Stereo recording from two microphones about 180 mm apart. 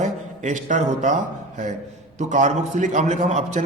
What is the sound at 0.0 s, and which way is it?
A man's voice, 45° right (ahead or behind).